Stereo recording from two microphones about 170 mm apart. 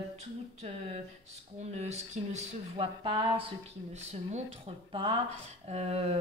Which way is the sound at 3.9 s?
40° right (ahead or behind).